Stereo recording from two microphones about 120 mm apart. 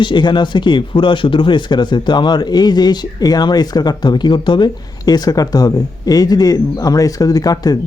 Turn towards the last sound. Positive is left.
turn(degrees=30)  # may be behind; listen again after turning